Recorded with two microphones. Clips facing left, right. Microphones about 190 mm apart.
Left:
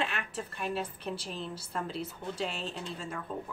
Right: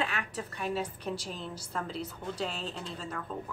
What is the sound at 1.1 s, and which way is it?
Speech, 25° left (ahead or behind).